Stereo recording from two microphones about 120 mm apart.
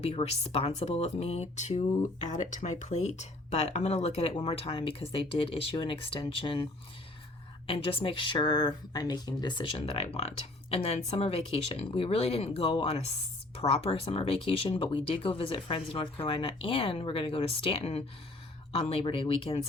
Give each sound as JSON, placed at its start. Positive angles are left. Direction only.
{"t": 0.0, "sound": "speech", "side_deg": 60}
{"t": 2.2, "sound": "speech", "side_deg": 90}
{"t": 7.7, "sound": "speech", "side_deg": 50}